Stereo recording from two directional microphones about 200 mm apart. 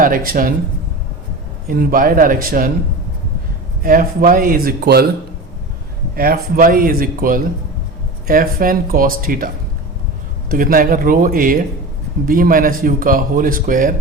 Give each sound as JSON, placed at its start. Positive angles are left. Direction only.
{"t": 0.0, "sound": "speech", "side_deg": -45}
{"t": 1.6, "sound": "speech", "side_deg": -45}
{"t": 3.8, "sound": "speech", "side_deg": -45}
{"t": 6.1, "sound": "speech", "side_deg": -45}
{"t": 10.5, "sound": "speech", "side_deg": -45}